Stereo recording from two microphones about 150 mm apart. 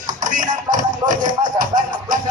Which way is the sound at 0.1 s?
60° right (ahead or behind).